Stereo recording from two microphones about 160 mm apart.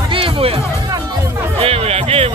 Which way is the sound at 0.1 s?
35° right (ahead or behind).